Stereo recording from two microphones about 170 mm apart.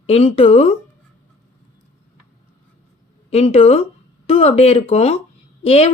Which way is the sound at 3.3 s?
35° left (ahead or behind).